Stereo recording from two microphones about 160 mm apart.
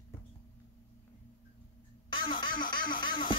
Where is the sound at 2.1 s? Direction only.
30° left (ahead or behind).